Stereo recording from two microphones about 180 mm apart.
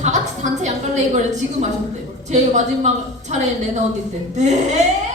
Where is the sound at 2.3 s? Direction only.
40° right (ahead or behind).